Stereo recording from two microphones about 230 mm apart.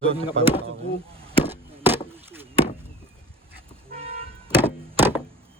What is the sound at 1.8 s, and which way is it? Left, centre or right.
Chop, centre.